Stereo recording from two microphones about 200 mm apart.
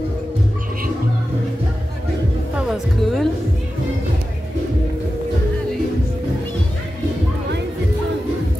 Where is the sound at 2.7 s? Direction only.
Centre (ahead or behind).